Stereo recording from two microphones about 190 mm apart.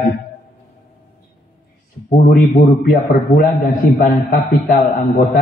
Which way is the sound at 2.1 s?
50° left (ahead or behind).